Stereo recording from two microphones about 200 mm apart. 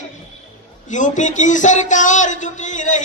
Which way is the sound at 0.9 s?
40° left (ahead or behind).